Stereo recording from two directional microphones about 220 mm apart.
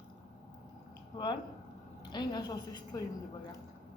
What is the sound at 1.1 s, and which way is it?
A woman's voice, 20° left (ahead or behind).